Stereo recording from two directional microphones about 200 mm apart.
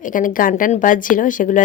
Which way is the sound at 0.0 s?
40° left (ahead or behind).